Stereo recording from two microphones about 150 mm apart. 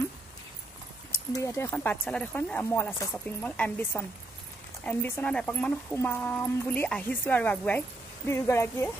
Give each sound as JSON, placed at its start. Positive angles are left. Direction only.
{"t": 1.1, "sound": "a woman's voice", "side_deg": 20}